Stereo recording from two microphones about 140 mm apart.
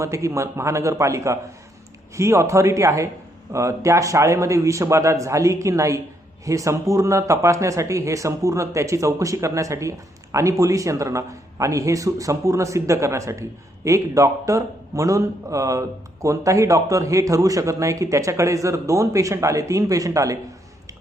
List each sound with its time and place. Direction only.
0.0 s a man's voice: 20° right (ahead or behind)